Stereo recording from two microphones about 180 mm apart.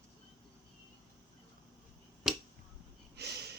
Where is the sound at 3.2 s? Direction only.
70° right (ahead or behind).